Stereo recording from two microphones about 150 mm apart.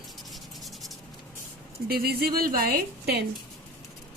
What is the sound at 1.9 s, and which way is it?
Speech, 90° right.